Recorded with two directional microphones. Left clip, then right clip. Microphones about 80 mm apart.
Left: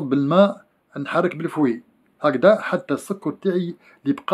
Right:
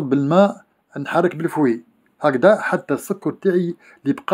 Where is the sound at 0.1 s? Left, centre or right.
Right.